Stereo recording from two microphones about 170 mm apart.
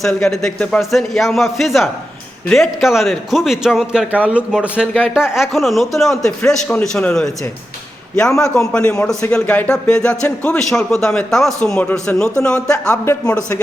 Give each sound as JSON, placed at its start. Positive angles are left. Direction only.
{"t": 0.2, "sound": "a man's voice", "side_deg": 5}
{"t": 8.5, "sound": "a man's voice", "side_deg": 10}
{"t": 12.9, "sound": "a man's voice", "side_deg": 15}